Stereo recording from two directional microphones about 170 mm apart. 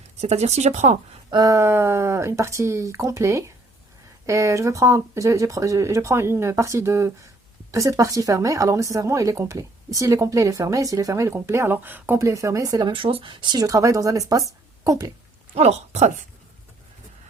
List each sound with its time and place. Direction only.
0.2 s speech: 40° right (ahead or behind)
1.3 s speech: 20° right (ahead or behind)
15.5 s speech: 40° right (ahead or behind)